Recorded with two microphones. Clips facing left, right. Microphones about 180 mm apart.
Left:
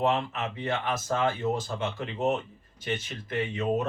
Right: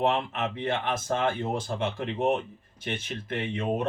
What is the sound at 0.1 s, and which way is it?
Speech, 55° right (ahead or behind).